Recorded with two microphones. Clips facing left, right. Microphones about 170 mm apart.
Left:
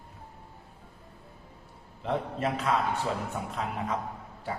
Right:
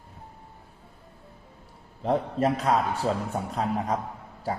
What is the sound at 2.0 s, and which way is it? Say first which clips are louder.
A man's voice: right 6 dB; 40° right (ahead or behind).